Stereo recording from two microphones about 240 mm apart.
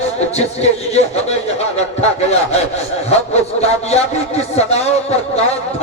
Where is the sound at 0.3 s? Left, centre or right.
Left.